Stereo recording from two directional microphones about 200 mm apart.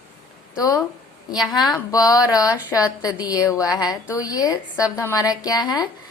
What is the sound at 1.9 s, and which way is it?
A woman's voice, 15° left (ahead or behind).